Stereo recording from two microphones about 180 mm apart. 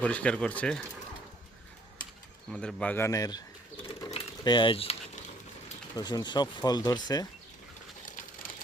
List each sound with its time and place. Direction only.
0.0 s speech: 5° left (ahead or behind)
2.5 s speech: 5° left (ahead or behind); by 3.4 s 20° left (ahead or behind)
4.1 s a sound: 25° left (ahead or behind)
6.0 s speech: 20° left (ahead or behind)
8.0 s sewing machine: 45° left (ahead or behind)